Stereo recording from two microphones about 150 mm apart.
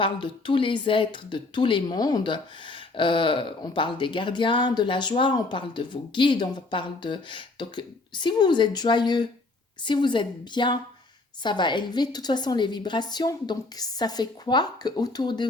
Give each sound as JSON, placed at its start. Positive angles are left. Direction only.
{"t": 0.0, "sound": "a woman's voice", "side_deg": 35}